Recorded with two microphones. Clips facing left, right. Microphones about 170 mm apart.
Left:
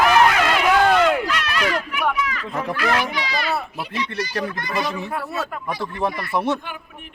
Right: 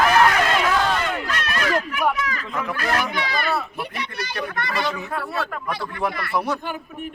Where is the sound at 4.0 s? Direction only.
60° right (ahead or behind).